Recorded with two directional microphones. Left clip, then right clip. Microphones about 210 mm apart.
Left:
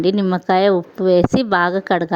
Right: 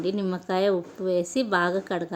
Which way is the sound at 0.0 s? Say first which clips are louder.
Left 11 dB; 40° left (ahead or behind).